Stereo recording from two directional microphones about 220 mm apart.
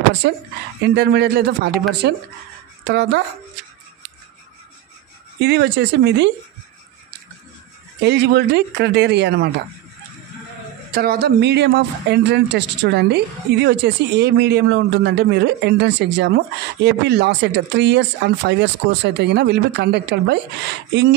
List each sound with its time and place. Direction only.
0.2 s speech: 50° right (ahead or behind)
5.4 s speech: 50° right (ahead or behind)
8.0 s speech: 50° right (ahead or behind)
10.9 s speech: 45° right (ahead or behind)